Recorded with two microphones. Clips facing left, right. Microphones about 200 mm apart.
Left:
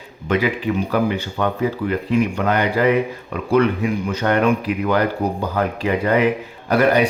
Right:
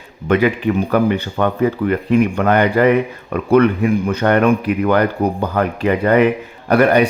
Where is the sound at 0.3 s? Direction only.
60° right (ahead or behind).